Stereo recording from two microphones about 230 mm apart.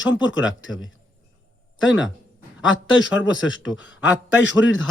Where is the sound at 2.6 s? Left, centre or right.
Left.